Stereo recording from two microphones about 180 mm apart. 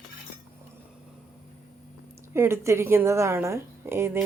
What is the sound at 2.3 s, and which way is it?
A woman's voice, 15° right (ahead or behind).